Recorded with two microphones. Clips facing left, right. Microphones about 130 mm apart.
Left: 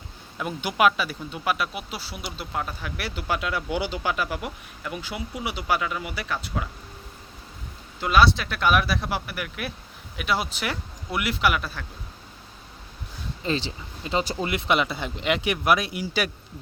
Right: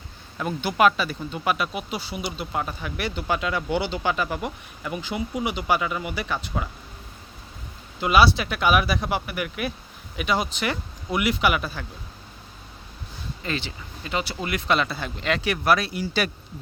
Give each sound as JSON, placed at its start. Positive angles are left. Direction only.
{"t": 0.3, "sound": "speech", "side_deg": 5}
{"t": 8.0, "sound": "speech", "side_deg": -5}
{"t": 13.4, "sound": "speech", "side_deg": 30}